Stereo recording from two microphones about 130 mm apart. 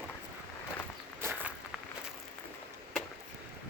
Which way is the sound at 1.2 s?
15° right (ahead or behind).